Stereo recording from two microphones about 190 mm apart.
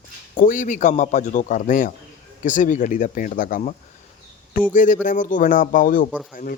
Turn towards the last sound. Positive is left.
turn(degrees=45)  # may be behind; listen again after turning